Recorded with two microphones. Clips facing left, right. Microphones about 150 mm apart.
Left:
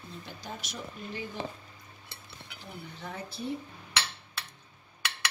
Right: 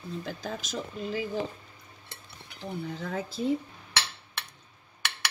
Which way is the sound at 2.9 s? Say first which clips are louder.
Right 7 dB; 90° right.